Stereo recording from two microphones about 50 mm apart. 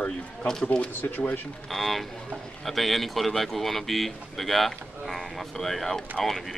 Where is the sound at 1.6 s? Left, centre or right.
Centre.